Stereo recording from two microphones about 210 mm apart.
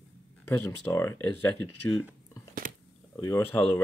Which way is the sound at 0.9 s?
10° left (ahead or behind).